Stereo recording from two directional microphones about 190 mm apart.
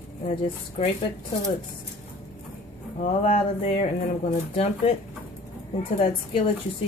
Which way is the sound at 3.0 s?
30° left (ahead or behind).